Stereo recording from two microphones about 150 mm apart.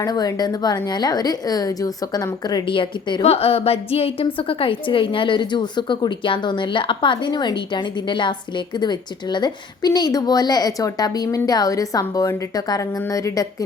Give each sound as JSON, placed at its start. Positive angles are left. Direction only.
{"t": 0.0, "sound": "a woman's voice", "side_deg": 25}